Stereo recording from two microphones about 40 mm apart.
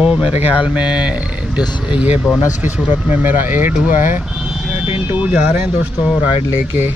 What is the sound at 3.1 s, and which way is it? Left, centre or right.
Speech, right.